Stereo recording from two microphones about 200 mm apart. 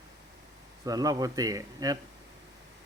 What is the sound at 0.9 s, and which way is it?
Speech, 20° right (ahead or behind).